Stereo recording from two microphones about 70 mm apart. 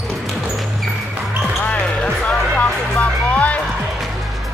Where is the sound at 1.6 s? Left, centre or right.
Centre.